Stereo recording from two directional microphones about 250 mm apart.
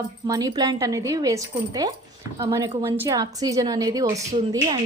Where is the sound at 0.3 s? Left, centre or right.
Centre.